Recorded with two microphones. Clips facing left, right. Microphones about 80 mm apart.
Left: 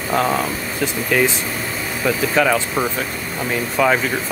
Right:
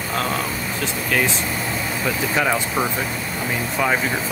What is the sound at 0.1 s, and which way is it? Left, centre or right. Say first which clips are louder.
Speech: left 6 dB; centre.